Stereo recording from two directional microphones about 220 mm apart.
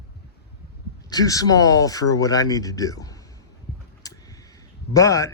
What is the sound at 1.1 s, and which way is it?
Speech, 15° left (ahead or behind).